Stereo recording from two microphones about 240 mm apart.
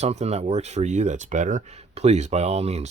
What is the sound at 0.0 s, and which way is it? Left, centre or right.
Speech, right.